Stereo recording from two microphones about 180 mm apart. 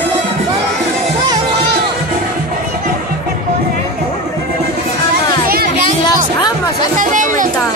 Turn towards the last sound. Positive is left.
turn(degrees=-45)  # may be behind; listen again after turning